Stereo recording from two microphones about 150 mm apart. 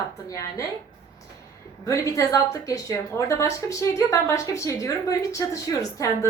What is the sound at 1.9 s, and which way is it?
A woman's voice, 20° left (ahead or behind).